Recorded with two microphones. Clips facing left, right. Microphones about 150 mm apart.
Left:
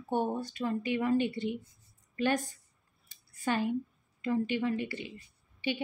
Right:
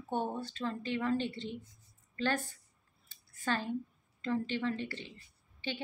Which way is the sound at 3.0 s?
15° left (ahead or behind).